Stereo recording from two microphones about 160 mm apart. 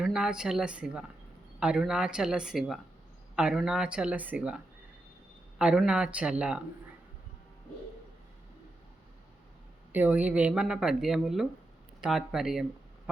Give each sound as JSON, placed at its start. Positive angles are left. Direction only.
{"t": 0.0, "sound": "speech", "side_deg": -5}
{"t": 9.9, "sound": "speech", "side_deg": -10}